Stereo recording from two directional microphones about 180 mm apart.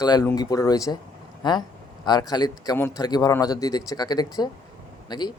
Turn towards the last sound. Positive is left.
turn(degrees=25)  # may be behind; listen again after turning